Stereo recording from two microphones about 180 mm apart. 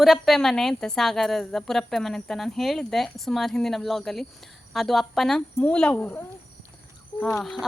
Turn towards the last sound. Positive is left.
turn(degrees=0)  # may be behind; listen again after turning